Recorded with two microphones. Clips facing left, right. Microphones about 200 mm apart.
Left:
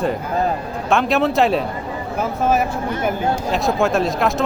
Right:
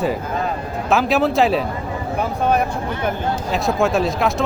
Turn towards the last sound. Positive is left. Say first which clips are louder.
# even
turn(degrees=0)  # may be behind; listen again after turning